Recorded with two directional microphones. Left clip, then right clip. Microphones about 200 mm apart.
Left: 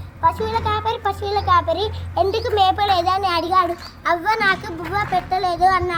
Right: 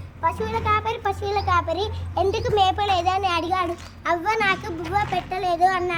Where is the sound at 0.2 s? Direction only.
10° right (ahead or behind).